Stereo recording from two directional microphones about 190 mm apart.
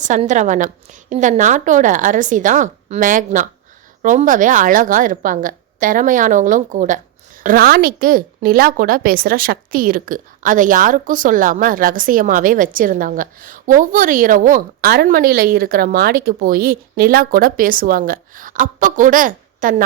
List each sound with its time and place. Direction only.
0.0 s a woman's voice: 40° right (ahead or behind)